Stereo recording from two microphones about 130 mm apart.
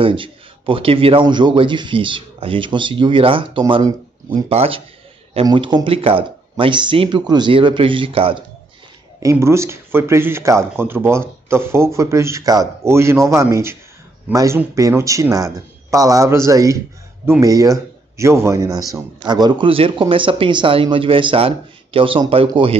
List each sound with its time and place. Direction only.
0.0 s speech: 40° right (ahead or behind)
5.4 s speech: 35° right (ahead or behind)
9.2 s speech: 20° right (ahead or behind)
19.7 s speech: 45° right (ahead or behind)